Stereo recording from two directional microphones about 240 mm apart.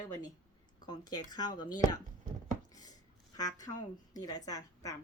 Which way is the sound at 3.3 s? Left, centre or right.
Centre.